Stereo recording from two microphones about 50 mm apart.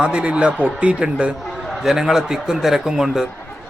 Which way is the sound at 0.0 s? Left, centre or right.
Right.